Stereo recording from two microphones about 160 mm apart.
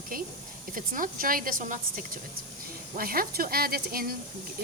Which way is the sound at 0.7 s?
60° right (ahead or behind).